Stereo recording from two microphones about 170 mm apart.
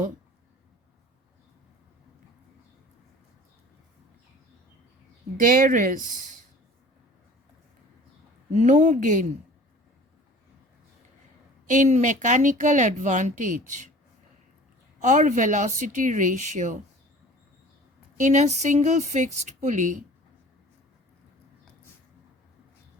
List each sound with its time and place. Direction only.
5.4 s speech: 55° right (ahead or behind)
8.5 s speech: 45° right (ahead or behind)
11.7 s speech: 45° right (ahead or behind)
15.0 s speech: 45° right (ahead or behind)
18.2 s speech: 40° right (ahead or behind)